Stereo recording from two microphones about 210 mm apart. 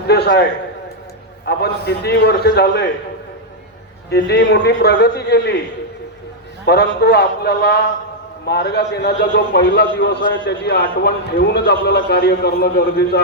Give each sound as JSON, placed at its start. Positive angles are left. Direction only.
{"t": 0.1, "sound": "a sound", "side_deg": 50}
{"t": 1.5, "sound": "a man's voice", "side_deg": 50}
{"t": 4.1, "sound": "a man's voice", "side_deg": 50}
{"t": 6.7, "sound": "a man's voice", "side_deg": 50}